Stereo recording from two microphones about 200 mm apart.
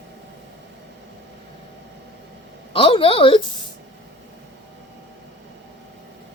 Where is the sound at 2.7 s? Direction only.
25° left (ahead or behind).